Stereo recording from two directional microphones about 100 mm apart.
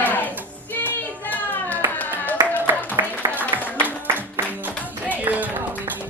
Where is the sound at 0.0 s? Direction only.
20° left (ahead or behind).